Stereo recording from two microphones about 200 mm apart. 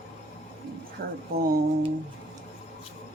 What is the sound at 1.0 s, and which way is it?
Speech, 50° right (ahead or behind).